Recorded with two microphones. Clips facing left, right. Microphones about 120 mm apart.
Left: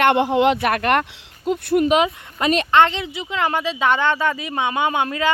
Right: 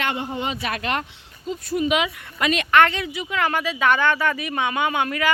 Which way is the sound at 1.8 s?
40° left (ahead or behind).